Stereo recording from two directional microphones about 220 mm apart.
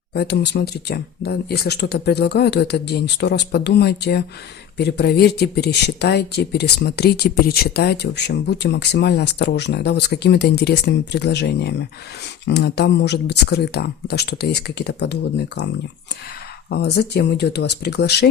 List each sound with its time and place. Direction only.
0.1 s speech: 50° left (ahead or behind)
16.6 s speech: 50° left (ahead or behind)